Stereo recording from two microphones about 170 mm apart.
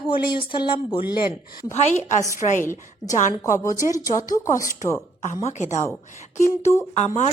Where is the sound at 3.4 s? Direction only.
20° left (ahead or behind).